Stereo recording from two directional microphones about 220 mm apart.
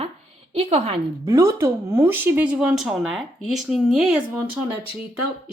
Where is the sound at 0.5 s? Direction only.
25° right (ahead or behind).